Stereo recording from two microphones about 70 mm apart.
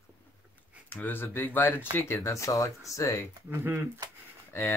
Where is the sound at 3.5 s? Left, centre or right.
Right.